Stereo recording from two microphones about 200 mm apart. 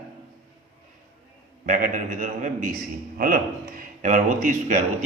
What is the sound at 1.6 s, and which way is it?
A man's voice, 40° right (ahead or behind).